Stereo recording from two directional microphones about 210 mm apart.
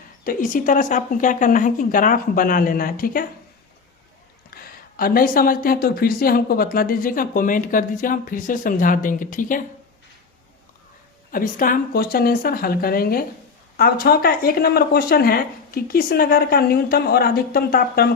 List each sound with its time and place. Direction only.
0.3 s speech: 40° left (ahead or behind)
4.5 s speech: 45° left (ahead or behind)
11.3 s speech: 40° left (ahead or behind)